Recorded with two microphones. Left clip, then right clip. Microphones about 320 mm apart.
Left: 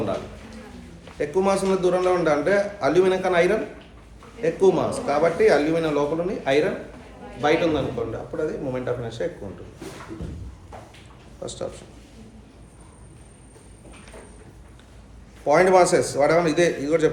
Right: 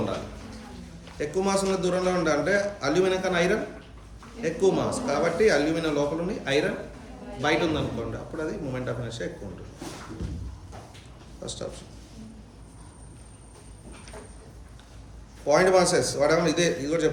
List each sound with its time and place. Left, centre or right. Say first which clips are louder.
1.2 s a man's voice: left 4 dB; centre
11.4 s a man's voice: left 3 dB; left
15.4 s a man's voice: left 4 dB; left